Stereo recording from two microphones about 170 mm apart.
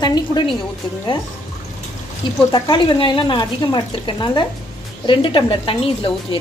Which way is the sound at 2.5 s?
25° left (ahead or behind).